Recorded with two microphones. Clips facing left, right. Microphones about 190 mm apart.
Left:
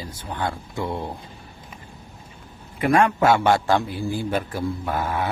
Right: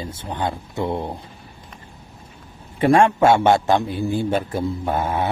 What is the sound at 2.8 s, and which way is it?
A man's voice, 30° right (ahead or behind).